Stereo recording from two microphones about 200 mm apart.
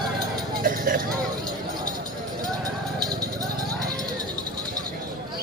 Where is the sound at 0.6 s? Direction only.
45° right (ahead or behind).